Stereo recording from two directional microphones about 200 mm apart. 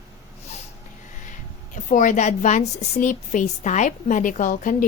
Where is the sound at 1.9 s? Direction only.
40° left (ahead or behind).